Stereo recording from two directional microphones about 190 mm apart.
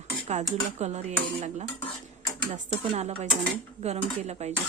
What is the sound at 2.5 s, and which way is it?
A woman's voice, 40° right (ahead or behind).